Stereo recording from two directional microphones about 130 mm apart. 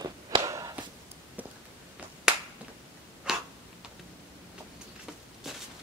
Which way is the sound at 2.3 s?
5° right (ahead or behind).